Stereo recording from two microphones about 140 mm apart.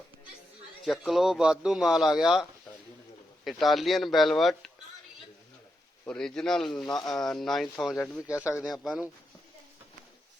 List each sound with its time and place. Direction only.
0.9 s speech: centre (ahead or behind)
6.1 s speech: 5° left (ahead or behind)
7.9 s speech: 15° left (ahead or behind)
8.6 s speech: centre (ahead or behind)